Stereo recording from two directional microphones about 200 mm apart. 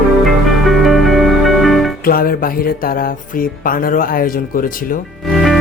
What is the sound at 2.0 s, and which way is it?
Speech, 45° left (ahead or behind).